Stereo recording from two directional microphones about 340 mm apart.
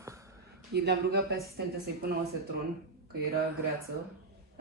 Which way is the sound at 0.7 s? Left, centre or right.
Right.